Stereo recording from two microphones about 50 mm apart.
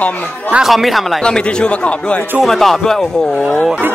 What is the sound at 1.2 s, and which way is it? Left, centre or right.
Speech, centre.